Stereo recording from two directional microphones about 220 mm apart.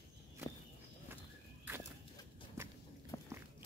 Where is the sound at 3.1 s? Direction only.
15° left (ahead or behind).